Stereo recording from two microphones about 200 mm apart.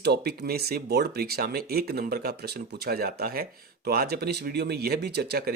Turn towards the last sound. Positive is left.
turn(degrees=-50)  # may be behind; listen again after turning